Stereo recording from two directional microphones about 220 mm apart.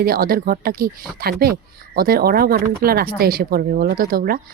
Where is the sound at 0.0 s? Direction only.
40° right (ahead or behind).